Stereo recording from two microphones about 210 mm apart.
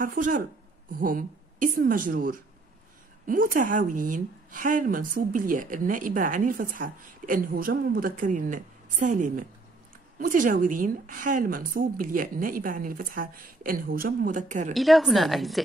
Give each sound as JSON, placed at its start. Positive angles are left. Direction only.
{"t": 0.0, "sound": "a woman's voice", "side_deg": -40}
{"t": 14.7, "sound": "a woman's voice", "side_deg": 0}